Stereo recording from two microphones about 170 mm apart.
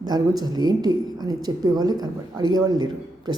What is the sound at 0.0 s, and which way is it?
Speech, 25° right (ahead or behind).